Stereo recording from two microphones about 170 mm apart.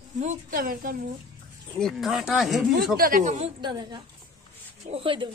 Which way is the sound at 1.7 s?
5° left (ahead or behind).